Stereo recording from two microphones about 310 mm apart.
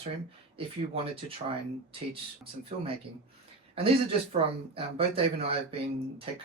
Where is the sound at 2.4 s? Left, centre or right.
Centre.